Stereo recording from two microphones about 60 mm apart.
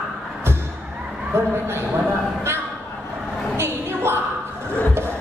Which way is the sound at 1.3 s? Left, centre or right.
Right.